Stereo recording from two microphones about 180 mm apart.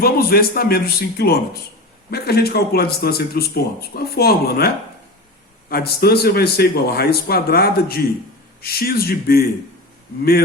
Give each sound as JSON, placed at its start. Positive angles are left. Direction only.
{"t": 0.0, "sound": "speech", "side_deg": 55}